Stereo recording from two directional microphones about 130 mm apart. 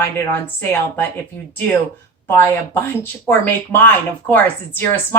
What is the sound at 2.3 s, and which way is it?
A woman's voice, 20° left (ahead or behind).